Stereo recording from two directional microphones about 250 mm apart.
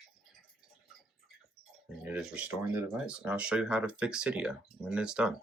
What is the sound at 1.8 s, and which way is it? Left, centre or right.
Speech, centre.